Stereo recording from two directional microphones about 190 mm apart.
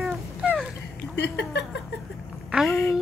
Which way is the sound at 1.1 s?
65° left (ahead or behind).